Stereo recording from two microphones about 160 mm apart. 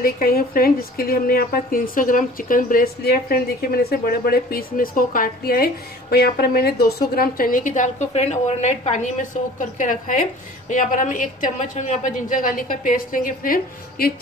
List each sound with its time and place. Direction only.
0.0 s a woman's voice: 65° left (ahead or behind)
8.1 s a woman's voice: 40° left (ahead or behind); by 14.1 s 65° left (ahead or behind)